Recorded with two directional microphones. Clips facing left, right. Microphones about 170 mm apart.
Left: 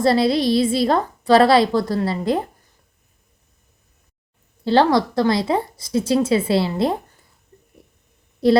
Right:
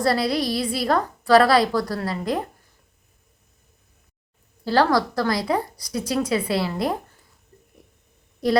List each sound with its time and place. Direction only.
0.0 s a woman's voice: 25° left (ahead or behind)
4.6 s a woman's voice: 25° left (ahead or behind)
8.4 s a woman's voice: 30° left (ahead or behind)